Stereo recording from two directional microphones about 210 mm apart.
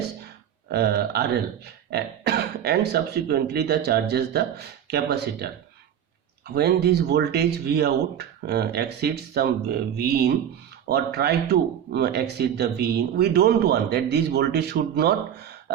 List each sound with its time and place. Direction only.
0.7 s speech: 50° right (ahead or behind)
6.5 s speech: 50° right (ahead or behind)